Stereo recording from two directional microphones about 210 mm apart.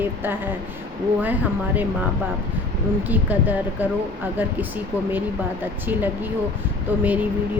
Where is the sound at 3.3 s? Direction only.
10° right (ahead or behind).